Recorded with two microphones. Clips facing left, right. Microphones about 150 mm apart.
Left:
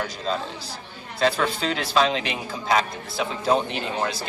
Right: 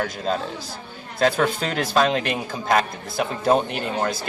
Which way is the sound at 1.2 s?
50° right (ahead or behind).